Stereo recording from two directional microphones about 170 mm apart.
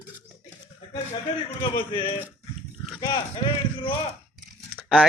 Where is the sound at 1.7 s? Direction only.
30° left (ahead or behind).